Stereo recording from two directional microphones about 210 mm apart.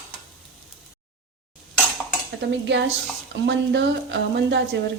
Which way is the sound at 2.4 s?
55° right (ahead or behind).